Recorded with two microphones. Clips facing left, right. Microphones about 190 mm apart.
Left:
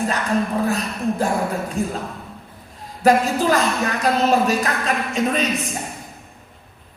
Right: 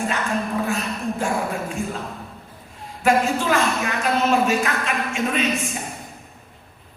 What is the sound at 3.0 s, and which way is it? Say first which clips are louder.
Speech: left 3 dB; 35° left (ahead or behind).